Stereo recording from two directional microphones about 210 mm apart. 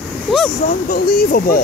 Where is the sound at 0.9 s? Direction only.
40° left (ahead or behind).